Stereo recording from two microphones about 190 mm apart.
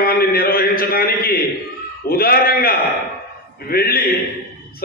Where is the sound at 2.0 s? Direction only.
50° left (ahead or behind).